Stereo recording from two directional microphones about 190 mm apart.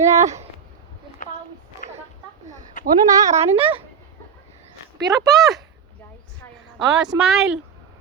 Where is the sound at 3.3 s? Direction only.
30° right (ahead or behind).